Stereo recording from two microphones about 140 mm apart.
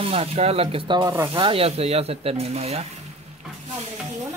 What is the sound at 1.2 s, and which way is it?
Speech, 40° right (ahead or behind).